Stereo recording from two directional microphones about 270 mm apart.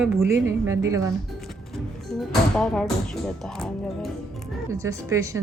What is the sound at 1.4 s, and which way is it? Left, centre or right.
Speech, centre.